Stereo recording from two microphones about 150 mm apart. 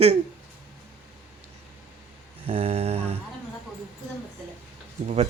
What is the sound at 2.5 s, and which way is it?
Mantra, 50° right (ahead or behind).